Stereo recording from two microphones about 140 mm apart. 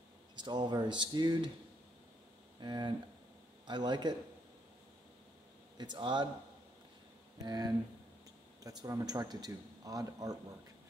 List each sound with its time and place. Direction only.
0.4 s speech: 30° right (ahead or behind)
2.6 s speech: 30° right (ahead or behind)
5.8 s speech: 35° right (ahead or behind)
7.4 s a man's voice: 30° right (ahead or behind)